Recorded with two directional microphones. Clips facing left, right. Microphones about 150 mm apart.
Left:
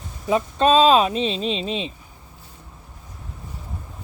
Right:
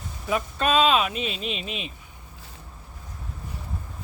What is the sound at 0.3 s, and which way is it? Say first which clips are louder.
Speech: left 7 dB; 30° left (ahead or behind).